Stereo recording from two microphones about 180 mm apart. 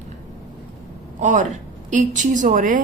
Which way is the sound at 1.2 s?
45° right (ahead or behind).